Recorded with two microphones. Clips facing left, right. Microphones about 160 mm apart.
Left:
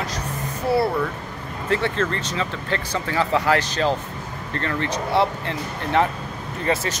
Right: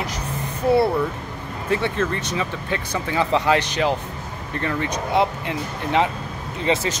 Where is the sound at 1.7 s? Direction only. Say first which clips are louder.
Even; 15° right (ahead or behind).